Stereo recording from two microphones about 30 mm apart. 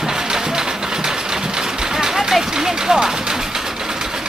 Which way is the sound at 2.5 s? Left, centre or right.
Right.